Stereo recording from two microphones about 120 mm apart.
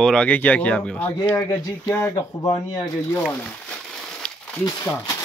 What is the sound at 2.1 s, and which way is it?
Speech, 35° left (ahead or behind).